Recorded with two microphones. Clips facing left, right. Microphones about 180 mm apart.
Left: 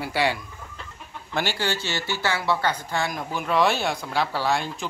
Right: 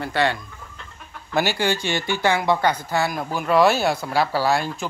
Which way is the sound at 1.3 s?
10° right (ahead or behind).